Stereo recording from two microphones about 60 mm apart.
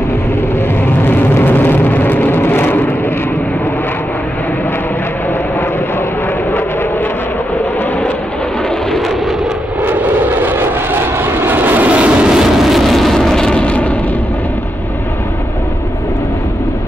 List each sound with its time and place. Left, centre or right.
0.8 s vehicle: left
9.8 s vehicle: right; by 13.9 s left